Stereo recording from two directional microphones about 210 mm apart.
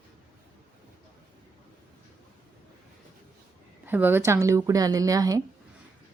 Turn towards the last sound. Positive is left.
turn(degrees=-15)  # may be behind; listen again after turning